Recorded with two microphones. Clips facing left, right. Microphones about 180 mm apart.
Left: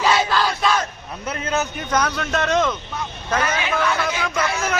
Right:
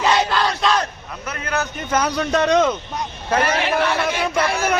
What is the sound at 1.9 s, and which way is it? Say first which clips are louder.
Speech: right 1 dB; 10° right (ahead or behind).